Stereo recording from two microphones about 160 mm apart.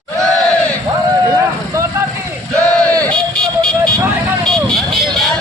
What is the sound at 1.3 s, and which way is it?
Vehicle, 20° right (ahead or behind).